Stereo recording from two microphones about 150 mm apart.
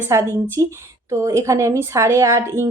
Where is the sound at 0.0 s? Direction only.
15° right (ahead or behind).